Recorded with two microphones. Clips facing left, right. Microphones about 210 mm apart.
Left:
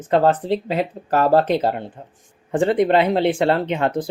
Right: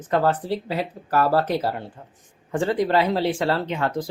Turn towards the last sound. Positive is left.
turn(degrees=20)  # may be behind; listen again after turning